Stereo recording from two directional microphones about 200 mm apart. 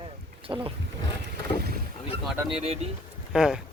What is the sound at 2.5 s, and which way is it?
Speech, 30° right (ahead or behind).